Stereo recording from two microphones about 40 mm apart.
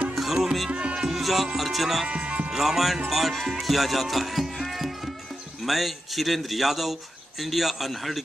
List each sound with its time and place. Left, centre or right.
0.1 s music: centre
0.7 s music: right
1.2 s music: centre
1.6 s speech: centre
2.0 s music: right
2.5 s music: centre
3.1 s speech: centre